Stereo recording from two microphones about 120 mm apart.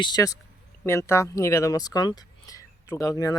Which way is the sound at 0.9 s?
20° left (ahead or behind).